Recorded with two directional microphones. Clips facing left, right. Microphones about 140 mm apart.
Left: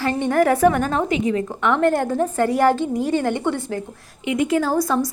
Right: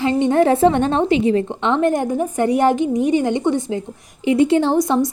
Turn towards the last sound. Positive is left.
turn(degrees=-20)  # may be behind; listen again after turning